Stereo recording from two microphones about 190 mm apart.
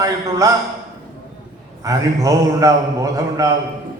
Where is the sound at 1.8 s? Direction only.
15° right (ahead or behind).